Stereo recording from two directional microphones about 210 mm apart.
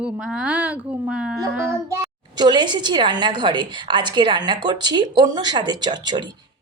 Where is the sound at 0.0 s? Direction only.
5° right (ahead or behind).